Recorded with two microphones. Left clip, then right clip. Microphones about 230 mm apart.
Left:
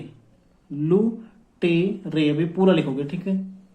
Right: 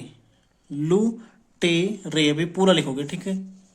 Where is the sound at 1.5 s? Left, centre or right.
Right.